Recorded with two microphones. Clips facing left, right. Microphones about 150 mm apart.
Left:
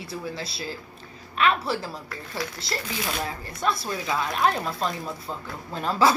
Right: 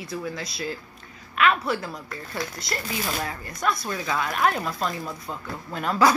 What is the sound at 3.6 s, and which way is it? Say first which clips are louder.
Speech: even; 30° left (ahead or behind).